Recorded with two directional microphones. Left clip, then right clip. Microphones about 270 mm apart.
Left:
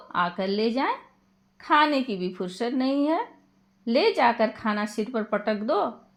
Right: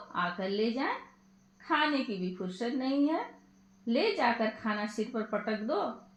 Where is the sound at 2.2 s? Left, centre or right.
Left.